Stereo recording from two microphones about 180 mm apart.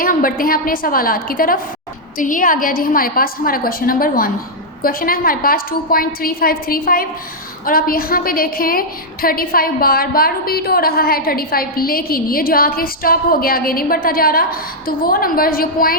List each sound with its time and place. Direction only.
0.0 s a woman's voice: 50° left (ahead or behind)